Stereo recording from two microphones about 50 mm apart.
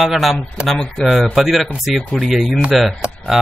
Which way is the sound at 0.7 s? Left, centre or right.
Centre.